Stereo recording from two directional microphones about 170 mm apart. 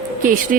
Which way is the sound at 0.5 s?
55° right (ahead or behind).